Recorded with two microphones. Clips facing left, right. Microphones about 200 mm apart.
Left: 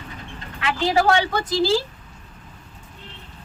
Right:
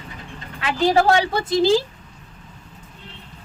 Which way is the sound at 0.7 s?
40° right (ahead or behind).